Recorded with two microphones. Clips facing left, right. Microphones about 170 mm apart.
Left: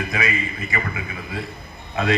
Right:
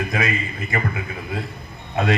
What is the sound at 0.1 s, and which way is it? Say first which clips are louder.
Speech: right 1 dB; 50° right (ahead or behind).